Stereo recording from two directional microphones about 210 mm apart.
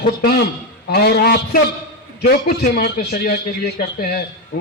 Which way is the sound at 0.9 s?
50° left (ahead or behind).